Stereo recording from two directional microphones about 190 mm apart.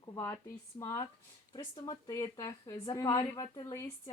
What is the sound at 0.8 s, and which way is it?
Speech, 15° left (ahead or behind).